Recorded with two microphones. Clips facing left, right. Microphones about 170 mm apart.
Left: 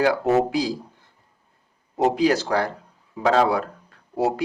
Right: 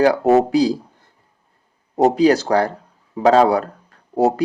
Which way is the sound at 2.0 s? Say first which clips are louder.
Right 5 dB; 35° right (ahead or behind).